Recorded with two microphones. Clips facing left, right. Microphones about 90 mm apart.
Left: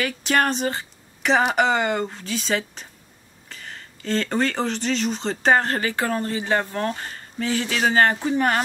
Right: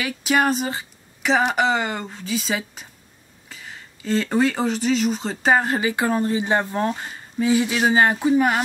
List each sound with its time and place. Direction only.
0.0 s speech: 5° right (ahead or behind)